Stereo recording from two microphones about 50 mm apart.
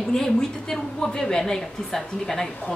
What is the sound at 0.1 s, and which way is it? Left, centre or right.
A woman's voice, centre.